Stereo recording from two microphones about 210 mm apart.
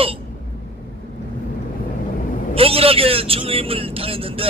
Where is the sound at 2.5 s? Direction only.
25° right (ahead or behind).